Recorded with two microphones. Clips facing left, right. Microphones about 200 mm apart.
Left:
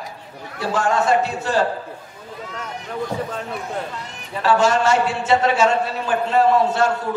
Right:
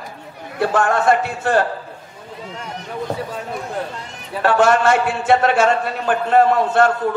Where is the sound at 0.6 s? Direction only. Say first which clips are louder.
Right 3 dB; 55° right (ahead or behind).